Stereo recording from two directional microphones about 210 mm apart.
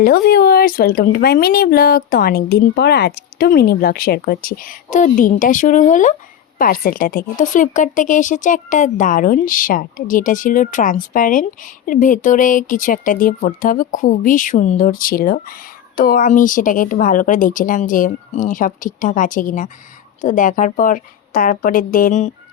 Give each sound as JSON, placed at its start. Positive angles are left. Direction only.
{"t": 0.0, "sound": "a woman's voice", "side_deg": 45}